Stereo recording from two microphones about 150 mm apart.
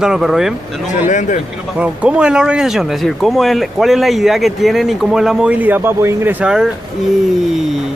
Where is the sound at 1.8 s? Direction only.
5° right (ahead or behind).